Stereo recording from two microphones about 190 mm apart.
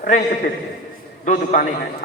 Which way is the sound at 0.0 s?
50° left (ahead or behind).